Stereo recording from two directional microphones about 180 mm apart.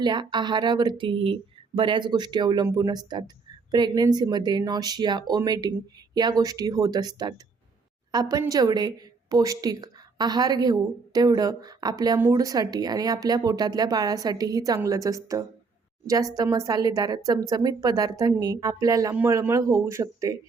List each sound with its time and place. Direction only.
0.0 s a woman's voice: 25° right (ahead or behind)